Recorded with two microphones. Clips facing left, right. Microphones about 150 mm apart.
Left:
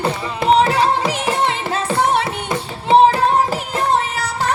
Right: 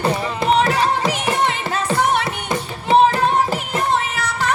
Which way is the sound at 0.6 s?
30° left (ahead or behind).